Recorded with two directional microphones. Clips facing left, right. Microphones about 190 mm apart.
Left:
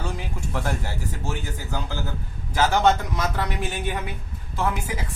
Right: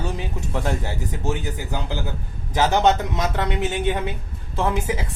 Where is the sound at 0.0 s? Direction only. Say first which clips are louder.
Right 3 dB; 20° right (ahead or behind).